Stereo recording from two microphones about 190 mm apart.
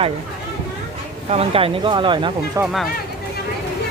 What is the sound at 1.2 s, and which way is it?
Speech, 30° right (ahead or behind).